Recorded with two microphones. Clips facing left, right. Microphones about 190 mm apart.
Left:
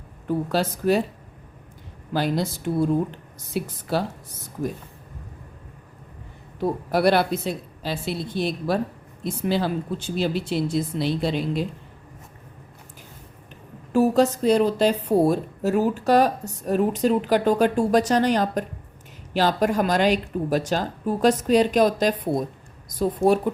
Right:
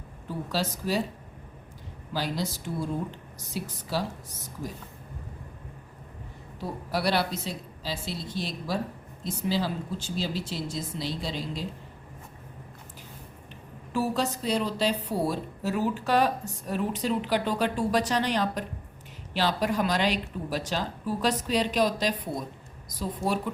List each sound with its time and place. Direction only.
0.3 s speech: 55° left (ahead or behind)
2.1 s speech: 55° left (ahead or behind)
6.6 s speech: 55° left (ahead or behind)
13.9 s a woman's voice: 45° left (ahead or behind)